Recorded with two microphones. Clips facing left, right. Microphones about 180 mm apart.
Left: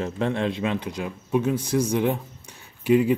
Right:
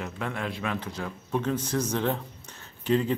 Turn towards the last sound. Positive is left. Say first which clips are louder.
# left 6 dB
turn(degrees=10)  # may be behind; listen again after turning